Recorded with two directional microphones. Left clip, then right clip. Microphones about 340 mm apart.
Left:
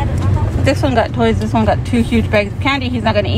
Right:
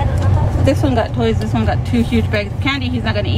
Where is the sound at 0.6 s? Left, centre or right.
Left.